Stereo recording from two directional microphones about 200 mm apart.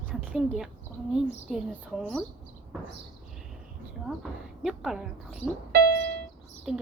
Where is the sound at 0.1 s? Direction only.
5° right (ahead or behind).